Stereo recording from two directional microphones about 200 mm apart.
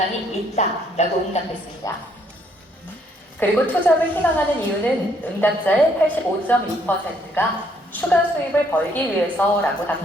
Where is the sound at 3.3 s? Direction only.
10° left (ahead or behind).